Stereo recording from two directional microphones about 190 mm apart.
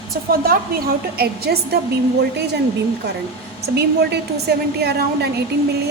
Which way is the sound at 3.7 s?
60° right (ahead or behind).